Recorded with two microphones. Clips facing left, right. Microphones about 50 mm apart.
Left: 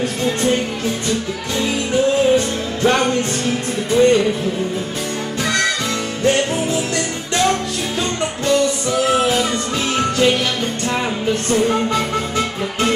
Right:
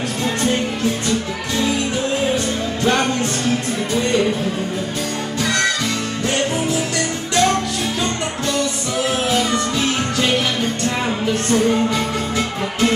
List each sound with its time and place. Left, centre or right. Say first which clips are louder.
2.3 s music: left 3 dB; left
11.5 s music: even; centre